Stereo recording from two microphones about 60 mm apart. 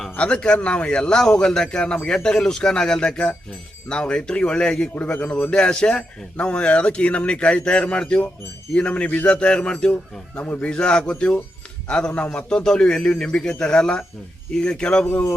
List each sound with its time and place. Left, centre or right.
0.2 s a man's voice: centre
4.9 s a man's voice: left